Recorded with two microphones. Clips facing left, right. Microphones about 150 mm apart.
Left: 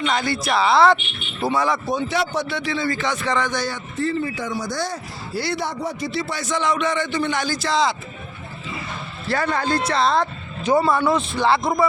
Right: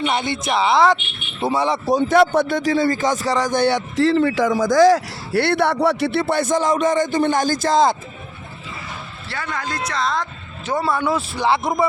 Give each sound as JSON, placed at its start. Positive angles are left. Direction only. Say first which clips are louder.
{"t": 0.1, "sound": "speech", "louder": "right 1 dB", "side_deg": -25}
{"t": 1.4, "sound": "speech", "louder": "right 1 dB", "side_deg": -25}
{"t": 3.5, "sound": "speech", "louder": "right 8 dB", "side_deg": -65}
{"t": 9.3, "sound": "speech", "louder": "left 6 dB", "side_deg": 35}
{"t": 10.8, "sound": "speech", "louder": "left 1 dB", "side_deg": -5}